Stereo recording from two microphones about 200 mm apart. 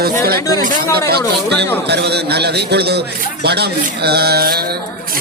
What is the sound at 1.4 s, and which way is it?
A man's voice, 55° right (ahead or behind).